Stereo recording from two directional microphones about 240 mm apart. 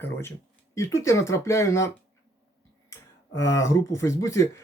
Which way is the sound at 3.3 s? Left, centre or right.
Centre.